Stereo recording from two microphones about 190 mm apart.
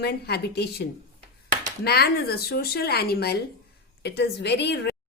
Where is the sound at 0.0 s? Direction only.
60° left (ahead or behind).